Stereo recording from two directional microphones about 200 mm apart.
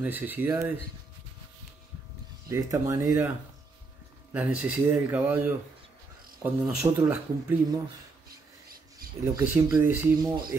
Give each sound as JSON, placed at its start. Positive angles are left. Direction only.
{"t": 0.0, "sound": "speech", "side_deg": -10}
{"t": 2.5, "sound": "speech", "side_deg": -15}
{"t": 4.3, "sound": "speech", "side_deg": -5}
{"t": 6.4, "sound": "speech", "side_deg": -15}
{"t": 9.4, "sound": "speech", "side_deg": -10}